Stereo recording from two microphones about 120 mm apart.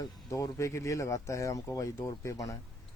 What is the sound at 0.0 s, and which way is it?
Speech, 30° left (ahead or behind).